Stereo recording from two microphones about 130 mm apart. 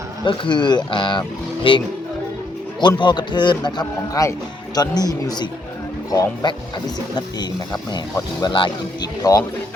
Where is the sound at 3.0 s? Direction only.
35° left (ahead or behind).